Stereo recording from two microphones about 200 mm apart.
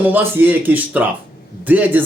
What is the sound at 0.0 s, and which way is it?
Speech, 10° right (ahead or behind).